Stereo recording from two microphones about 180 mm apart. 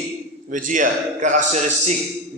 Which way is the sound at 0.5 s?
45° right (ahead or behind).